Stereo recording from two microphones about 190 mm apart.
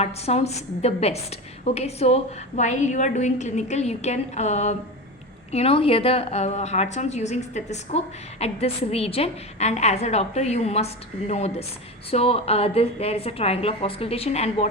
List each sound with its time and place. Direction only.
0.0 s a woman's voice: 35° left (ahead or behind)